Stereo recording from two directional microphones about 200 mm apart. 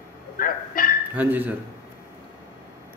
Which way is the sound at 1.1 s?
10° right (ahead or behind).